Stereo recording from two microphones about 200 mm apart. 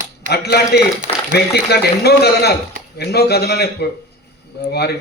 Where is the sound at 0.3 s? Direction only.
55° left (ahead or behind).